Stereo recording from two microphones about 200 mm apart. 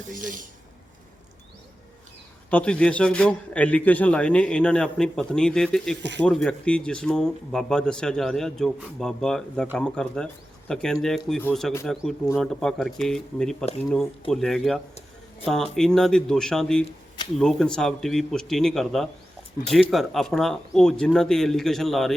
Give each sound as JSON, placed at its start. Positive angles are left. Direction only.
{"t": 0.1, "sound": "speech", "side_deg": -40}
{"t": 2.5, "sound": "a man's voice", "side_deg": 5}